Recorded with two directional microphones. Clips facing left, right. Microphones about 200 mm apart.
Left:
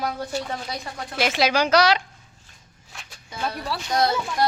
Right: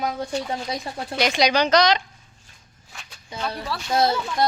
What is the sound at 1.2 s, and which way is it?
Speech, 5° left (ahead or behind).